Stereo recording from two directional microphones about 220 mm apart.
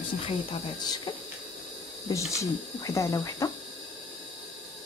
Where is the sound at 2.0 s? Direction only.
15° left (ahead or behind).